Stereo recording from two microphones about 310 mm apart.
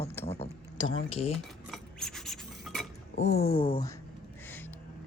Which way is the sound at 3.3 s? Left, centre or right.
Left.